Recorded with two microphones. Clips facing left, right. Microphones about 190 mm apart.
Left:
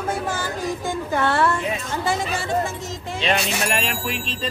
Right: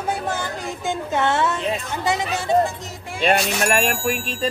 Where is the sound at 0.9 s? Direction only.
20° right (ahead or behind).